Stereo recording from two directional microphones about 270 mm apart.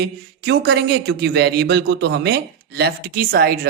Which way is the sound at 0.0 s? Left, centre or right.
Right.